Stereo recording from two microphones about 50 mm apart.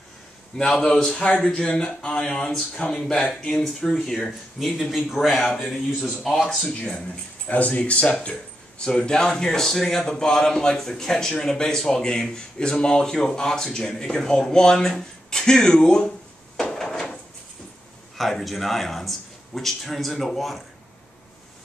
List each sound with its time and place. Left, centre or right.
0.6 s a man's voice: centre
7.4 s a man's voice: left; by 16.1 s centre
16.7 s drawer open or close: centre
18.1 s speech: centre